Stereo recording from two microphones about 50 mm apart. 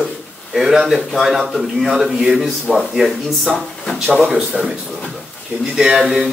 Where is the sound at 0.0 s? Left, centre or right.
Centre.